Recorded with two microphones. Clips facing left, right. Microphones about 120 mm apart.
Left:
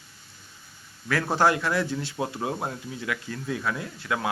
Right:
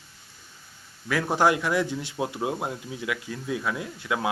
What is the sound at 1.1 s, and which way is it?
Speech, 15° right (ahead or behind).